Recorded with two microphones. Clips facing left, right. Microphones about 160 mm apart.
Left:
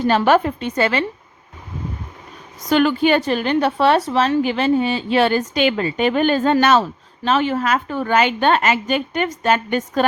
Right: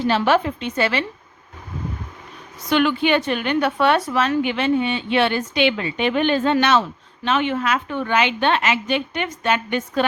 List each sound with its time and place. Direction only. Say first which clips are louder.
0.0 s a woman's voice: left 3 dB; 45° left (ahead or behind)
2.6 s a woman's voice: left 3 dB; 40° left (ahead or behind)